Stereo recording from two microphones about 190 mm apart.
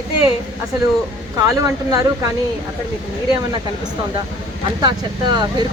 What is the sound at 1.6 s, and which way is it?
Speech, 20° right (ahead or behind).